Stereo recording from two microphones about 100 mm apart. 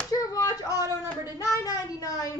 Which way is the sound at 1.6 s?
35° left (ahead or behind).